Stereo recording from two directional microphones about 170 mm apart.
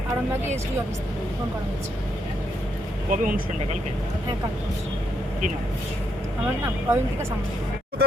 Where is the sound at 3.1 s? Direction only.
55° right (ahead or behind).